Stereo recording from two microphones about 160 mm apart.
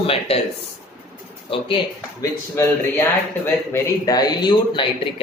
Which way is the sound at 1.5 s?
35° left (ahead or behind).